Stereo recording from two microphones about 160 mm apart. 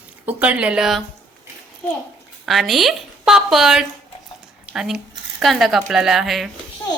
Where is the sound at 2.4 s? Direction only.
Centre (ahead or behind).